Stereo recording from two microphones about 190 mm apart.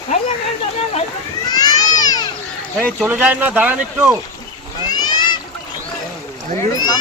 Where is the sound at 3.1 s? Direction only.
10° right (ahead or behind).